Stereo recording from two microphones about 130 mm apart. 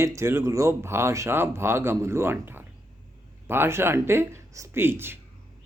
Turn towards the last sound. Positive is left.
turn(degrees=-15)  # may be behind; listen again after turning